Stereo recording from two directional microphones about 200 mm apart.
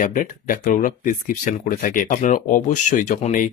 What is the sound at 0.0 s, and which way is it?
Speech, 40° left (ahead or behind).